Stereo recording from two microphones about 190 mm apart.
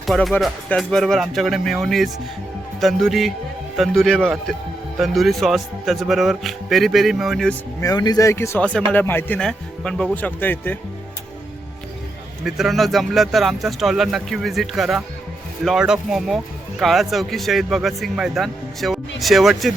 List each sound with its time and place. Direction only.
0.0 s speech: centre (ahead or behind)
7.8 s speech: 20° left (ahead or behind)
12.5 s speech: centre (ahead or behind)